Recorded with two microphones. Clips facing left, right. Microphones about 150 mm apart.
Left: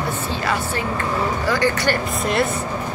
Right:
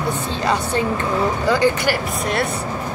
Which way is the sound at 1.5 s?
15° right (ahead or behind).